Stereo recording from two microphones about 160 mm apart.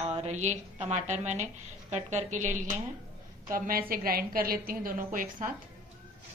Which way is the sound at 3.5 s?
60° right (ahead or behind).